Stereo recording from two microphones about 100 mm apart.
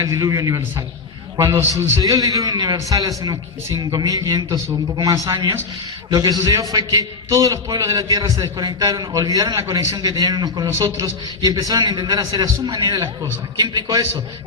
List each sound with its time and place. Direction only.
0.0 s a man's voice: 35° right (ahead or behind)
2.0 s a man's voice: 40° right (ahead or behind)